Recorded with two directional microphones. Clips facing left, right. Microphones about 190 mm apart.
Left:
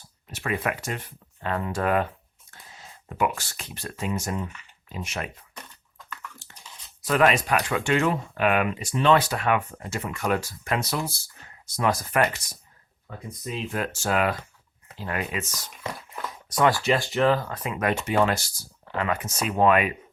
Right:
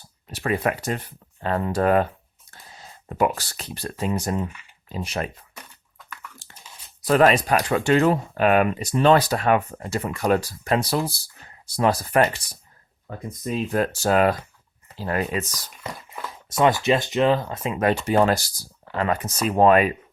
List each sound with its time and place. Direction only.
0.3 s speech: 35° right (ahead or behind)
6.4 s chewing: 35° right (ahead or behind)
7.0 s speech: 35° right (ahead or behind)
13.1 s speech: 45° right (ahead or behind)
15.8 s a sound: 5° right (ahead or behind)
16.5 s speech: 20° right (ahead or behind)